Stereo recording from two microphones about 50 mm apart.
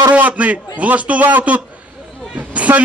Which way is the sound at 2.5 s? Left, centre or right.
Right.